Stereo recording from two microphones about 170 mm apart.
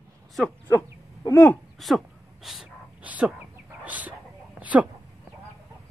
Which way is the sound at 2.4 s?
5° right (ahead or behind).